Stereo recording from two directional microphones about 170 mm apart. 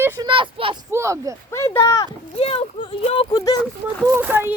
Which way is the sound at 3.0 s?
30° left (ahead or behind).